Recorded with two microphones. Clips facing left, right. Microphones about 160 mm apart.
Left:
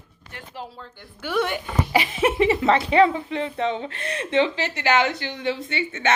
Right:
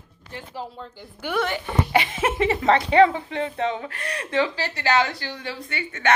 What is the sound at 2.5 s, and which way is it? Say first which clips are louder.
A woman's voice: even; 25° left (ahead or behind).